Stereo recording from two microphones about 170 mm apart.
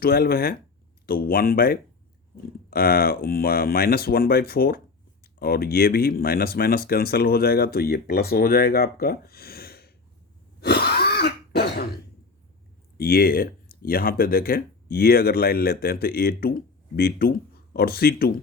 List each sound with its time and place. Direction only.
0.0 s speech: 60° left (ahead or behind)
10.6 s cough: 70° left (ahead or behind)
13.0 s speech: 60° left (ahead or behind)